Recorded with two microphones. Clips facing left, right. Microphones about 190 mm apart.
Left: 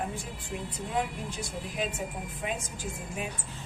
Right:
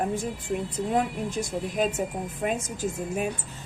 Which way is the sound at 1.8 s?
45° right (ahead or behind).